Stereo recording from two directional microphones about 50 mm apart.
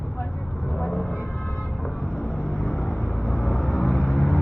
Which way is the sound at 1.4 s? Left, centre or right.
Left.